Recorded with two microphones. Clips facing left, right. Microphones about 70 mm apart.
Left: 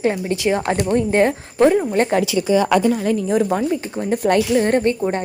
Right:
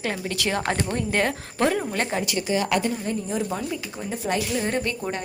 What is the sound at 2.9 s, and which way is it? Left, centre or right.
Speech, left.